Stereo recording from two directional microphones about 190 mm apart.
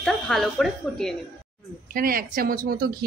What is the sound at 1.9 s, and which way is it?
A woman's voice, 50° right (ahead or behind).